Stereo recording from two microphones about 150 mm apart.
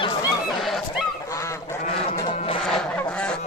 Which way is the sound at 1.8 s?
45° left (ahead or behind).